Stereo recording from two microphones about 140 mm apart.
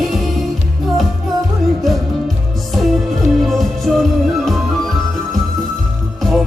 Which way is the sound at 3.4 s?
Centre (ahead or behind).